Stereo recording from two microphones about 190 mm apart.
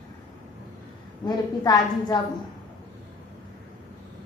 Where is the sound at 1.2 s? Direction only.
20° left (ahead or behind).